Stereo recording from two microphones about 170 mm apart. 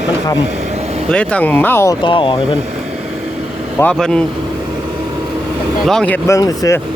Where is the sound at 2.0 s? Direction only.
30° left (ahead or behind).